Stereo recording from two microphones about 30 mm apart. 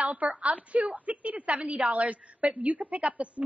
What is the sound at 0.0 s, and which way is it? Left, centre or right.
A woman's voice, right.